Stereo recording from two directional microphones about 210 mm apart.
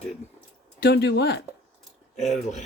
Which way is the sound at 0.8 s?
55° left (ahead or behind).